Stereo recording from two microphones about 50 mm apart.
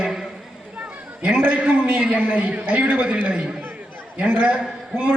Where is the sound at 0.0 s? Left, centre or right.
Centre.